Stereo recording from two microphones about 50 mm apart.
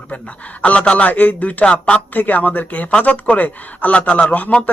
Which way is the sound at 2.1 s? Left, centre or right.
Left.